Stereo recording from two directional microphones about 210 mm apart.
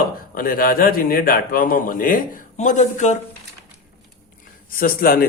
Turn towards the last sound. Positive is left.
turn(degrees=45)  # may be behind; listen again after turning